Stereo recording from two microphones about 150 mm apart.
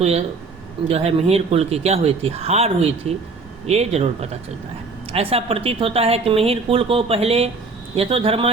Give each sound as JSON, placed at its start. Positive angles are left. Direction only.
{"t": 0.0, "sound": "speech", "side_deg": -45}